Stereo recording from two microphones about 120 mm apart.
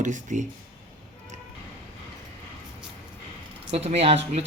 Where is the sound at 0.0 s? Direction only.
90° right.